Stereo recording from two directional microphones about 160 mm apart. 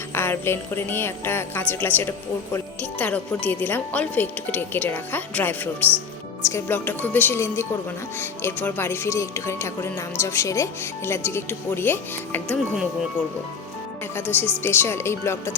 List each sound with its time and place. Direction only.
0.1 s a woman's voice: 15° left (ahead or behind)
14.2 s a woman's voice: 10° left (ahead or behind)